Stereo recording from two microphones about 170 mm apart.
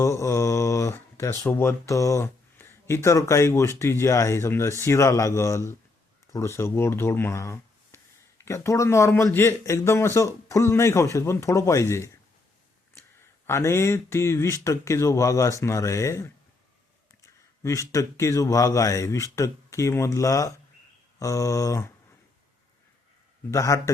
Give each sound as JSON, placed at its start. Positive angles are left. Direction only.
{"t": 0.0, "sound": "a sound", "side_deg": 15}
{"t": 1.9, "sound": "speech", "side_deg": 20}
{"t": 13.5, "sound": "speech", "side_deg": 15}
{"t": 17.6, "sound": "speech", "side_deg": 20}
{"t": 23.5, "sound": "speech", "side_deg": 15}